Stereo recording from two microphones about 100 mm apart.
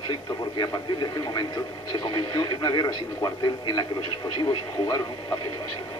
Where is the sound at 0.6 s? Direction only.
45° left (ahead or behind).